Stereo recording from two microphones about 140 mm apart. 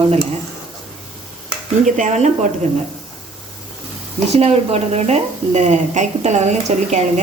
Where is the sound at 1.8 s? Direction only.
65° right (ahead or behind).